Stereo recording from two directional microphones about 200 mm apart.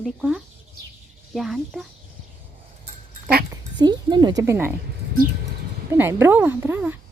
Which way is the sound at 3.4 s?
20° right (ahead or behind).